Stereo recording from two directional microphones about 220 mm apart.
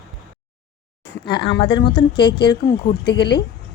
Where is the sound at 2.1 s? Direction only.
50° left (ahead or behind).